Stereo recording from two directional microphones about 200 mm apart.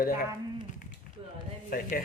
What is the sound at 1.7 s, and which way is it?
Speech, 45° left (ahead or behind).